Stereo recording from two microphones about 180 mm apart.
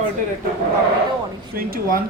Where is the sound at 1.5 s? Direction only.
55° right (ahead or behind).